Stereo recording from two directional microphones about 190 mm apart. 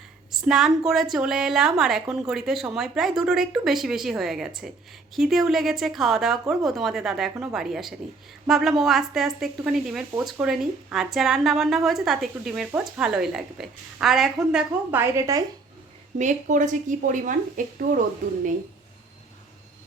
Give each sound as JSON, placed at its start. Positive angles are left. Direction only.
{"t": 0.3, "sound": "a woman's voice", "side_deg": 0}
{"t": 16.1, "sound": "speech", "side_deg": -40}